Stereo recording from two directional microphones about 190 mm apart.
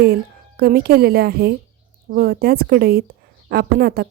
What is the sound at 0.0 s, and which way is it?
A woman's voice, 55° right (ahead or behind).